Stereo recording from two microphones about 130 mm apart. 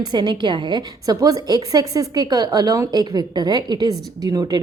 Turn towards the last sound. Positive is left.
turn(degrees=-30)  # may be behind; listen again after turning